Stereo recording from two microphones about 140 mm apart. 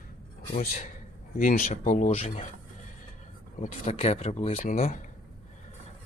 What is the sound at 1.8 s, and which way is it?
Speech, 55° left (ahead or behind).